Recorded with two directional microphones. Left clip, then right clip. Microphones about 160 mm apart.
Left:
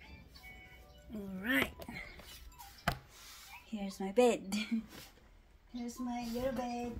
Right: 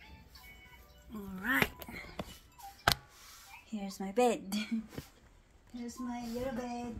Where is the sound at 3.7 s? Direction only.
30° right (ahead or behind).